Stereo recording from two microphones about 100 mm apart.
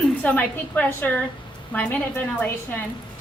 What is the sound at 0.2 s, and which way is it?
A woman's voice, 15° left (ahead or behind).